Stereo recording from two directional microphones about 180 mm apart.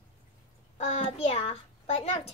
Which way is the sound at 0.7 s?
35° left (ahead or behind).